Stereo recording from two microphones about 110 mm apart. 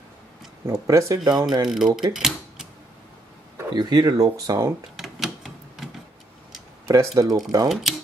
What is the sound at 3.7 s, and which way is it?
Speech, 40° right (ahead or behind).